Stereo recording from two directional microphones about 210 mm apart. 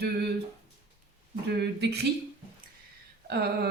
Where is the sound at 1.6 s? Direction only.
50° right (ahead or behind).